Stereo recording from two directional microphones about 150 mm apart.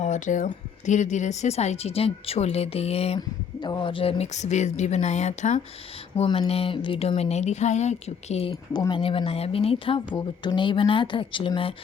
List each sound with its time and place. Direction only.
0.0 s a woman's voice: 55° left (ahead or behind)
3.2 s a woman's voice: 30° left (ahead or behind); by 5.5 s 50° left (ahead or behind)
6.1 s a woman's voice: 35° left (ahead or behind)
8.7 s a woman's voice: 30° left (ahead or behind)